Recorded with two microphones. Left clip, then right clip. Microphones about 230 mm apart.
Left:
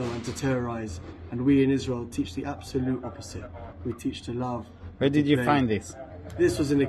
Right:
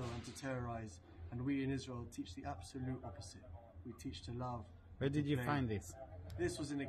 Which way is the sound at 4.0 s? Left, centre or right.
Right.